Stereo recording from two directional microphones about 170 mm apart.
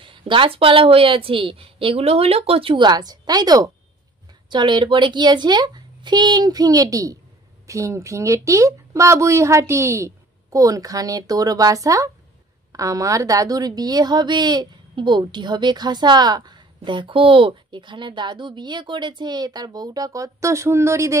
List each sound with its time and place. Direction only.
0.0 s a woman's voice: 30° right (ahead or behind)